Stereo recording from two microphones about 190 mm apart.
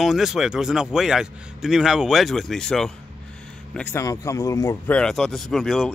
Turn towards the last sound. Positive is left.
turn(degrees=0)  # may be behind; listen again after turning